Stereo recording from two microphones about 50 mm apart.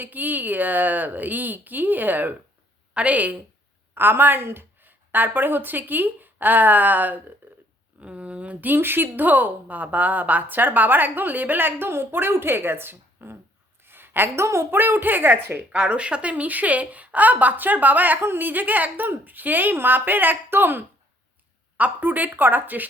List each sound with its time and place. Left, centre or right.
0.0 s a woman's voice: right
2.9 s a woman's voice: right
3.9 s a woman's voice: right
7.4 s a sound: right
8.0 s speech: right
8.6 s a woman's voice: right
13.8 s a sound: right
14.3 s a woman's voice: right
14.7 s speech: right
15.8 s a woman's voice: right
18.2 s a woman's voice: right
21.8 s a woman's voice: right